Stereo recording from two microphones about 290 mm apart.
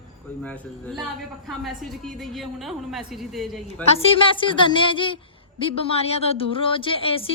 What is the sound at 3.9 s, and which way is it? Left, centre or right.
A woman's voice, centre.